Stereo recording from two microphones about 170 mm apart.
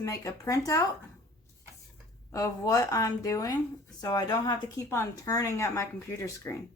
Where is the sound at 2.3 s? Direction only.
20° left (ahead or behind).